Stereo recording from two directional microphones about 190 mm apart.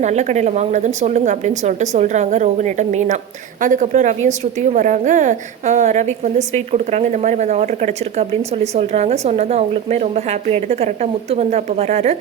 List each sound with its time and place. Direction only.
0.0 s speech: 40° right (ahead or behind)